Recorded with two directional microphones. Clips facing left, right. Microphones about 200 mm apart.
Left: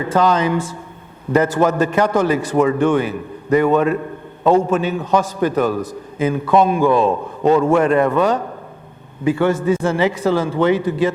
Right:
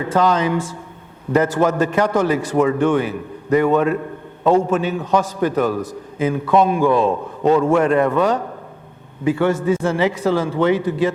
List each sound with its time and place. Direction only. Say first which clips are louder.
0.0 s a man's voice: left 1 dB; 15° left (ahead or behind)